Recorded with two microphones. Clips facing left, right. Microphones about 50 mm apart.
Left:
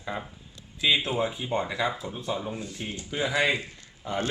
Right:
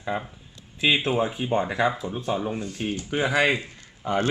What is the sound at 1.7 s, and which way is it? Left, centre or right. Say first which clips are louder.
Speech: right 5 dB; right.